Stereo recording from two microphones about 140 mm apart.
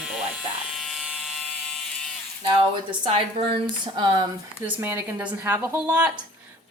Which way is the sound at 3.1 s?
35° right (ahead or behind).